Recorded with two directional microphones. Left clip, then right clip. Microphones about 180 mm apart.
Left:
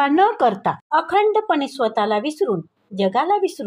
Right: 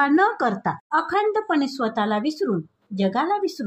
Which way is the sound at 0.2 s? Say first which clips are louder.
Left 4 dB; 30° left (ahead or behind).